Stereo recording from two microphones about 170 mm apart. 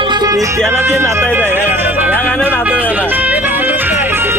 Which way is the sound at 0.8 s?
15° right (ahead or behind).